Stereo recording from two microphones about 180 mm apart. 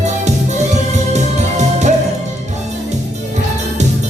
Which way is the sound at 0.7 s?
40° right (ahead or behind).